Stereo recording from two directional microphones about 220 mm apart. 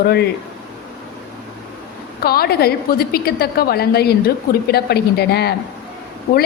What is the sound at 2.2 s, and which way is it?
A woman's voice, 45° left (ahead or behind).